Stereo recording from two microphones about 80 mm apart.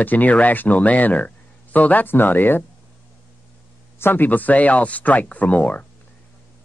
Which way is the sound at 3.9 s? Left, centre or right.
Left.